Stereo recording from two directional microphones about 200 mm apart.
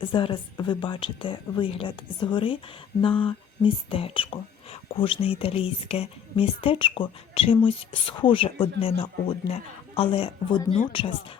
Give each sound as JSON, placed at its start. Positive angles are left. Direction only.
{"t": 0.0, "sound": "speech", "side_deg": 25}